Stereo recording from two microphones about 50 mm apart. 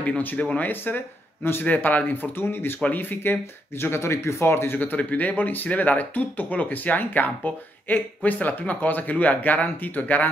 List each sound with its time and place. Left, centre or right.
0.2 s speech: left
1.7 s speech: left
2.3 s speech: left
4.7 s speech: left